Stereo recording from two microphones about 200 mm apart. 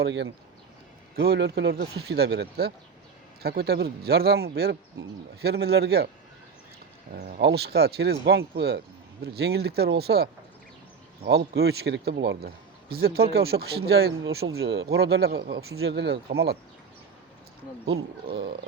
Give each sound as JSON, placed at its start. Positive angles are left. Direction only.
{"t": 0.0, "sound": "a man's voice", "side_deg": -60}
{"t": 7.3, "sound": "a man's voice", "side_deg": -55}
{"t": 11.3, "sound": "a man's voice", "side_deg": -55}